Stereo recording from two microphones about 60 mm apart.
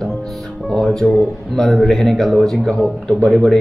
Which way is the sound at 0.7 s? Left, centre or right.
Centre.